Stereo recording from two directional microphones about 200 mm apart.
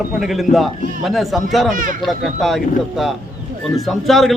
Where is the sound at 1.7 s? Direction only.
40° right (ahead or behind).